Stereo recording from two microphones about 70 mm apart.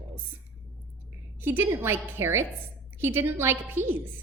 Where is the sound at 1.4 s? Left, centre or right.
Right.